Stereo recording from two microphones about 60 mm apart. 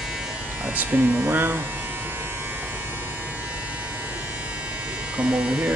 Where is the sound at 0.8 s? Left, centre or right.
Right.